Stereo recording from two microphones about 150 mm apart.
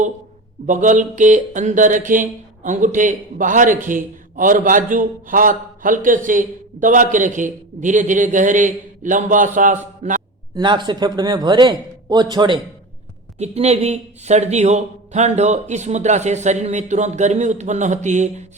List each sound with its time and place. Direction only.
0.6 s mantra: 55° right (ahead or behind)
10.5 s a man's voice: 30° right (ahead or behind)
13.4 s speech: 45° right (ahead or behind)